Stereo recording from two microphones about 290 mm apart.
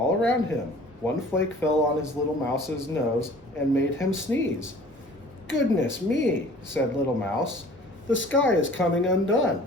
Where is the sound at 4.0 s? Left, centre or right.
Left.